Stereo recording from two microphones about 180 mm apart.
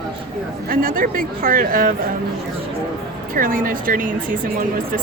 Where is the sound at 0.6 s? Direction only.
50° right (ahead or behind).